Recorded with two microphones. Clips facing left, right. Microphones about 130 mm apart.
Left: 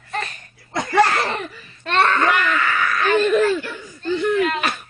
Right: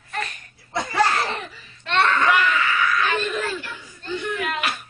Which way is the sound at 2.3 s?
55° left (ahead or behind).